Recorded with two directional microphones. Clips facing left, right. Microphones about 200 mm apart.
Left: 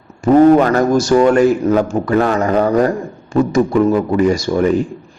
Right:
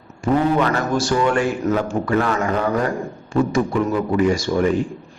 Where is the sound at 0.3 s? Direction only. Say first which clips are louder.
Left 10 dB; 45° left (ahead or behind).